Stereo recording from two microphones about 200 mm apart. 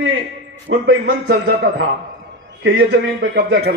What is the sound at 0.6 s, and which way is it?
A man's voice, 60° right (ahead or behind).